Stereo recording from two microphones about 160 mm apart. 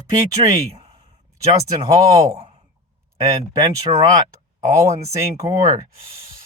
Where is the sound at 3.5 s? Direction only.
25° right (ahead or behind).